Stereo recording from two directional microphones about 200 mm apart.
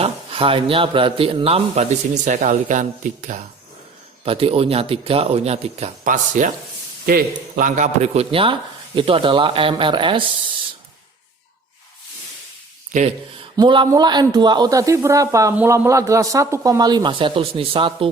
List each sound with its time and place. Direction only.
0.0 s a man's voice: 25° right (ahead or behind)
12.9 s speech: 35° right (ahead or behind)
13.6 s a man's voice: 20° right (ahead or behind)